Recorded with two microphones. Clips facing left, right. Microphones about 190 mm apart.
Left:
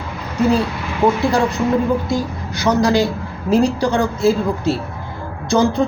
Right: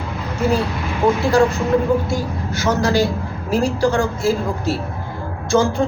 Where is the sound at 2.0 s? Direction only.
15° left (ahead or behind).